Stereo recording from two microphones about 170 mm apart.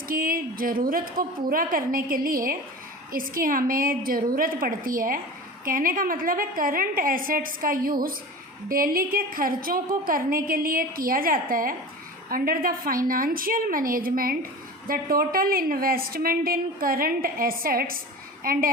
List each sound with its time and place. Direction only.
0.1 s a woman's voice: 55° right (ahead or behind)